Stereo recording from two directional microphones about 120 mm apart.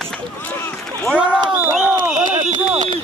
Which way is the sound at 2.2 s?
90° right.